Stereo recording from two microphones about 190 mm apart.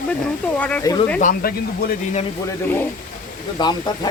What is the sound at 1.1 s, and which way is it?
Speech, 45° left (ahead or behind).